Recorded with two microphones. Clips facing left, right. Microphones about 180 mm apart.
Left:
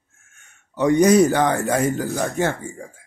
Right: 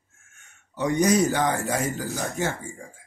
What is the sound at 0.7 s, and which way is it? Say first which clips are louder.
Speech: left 7 dB; 65° left (ahead or behind).